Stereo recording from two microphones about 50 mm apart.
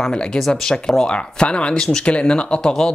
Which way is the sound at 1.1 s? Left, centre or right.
Left.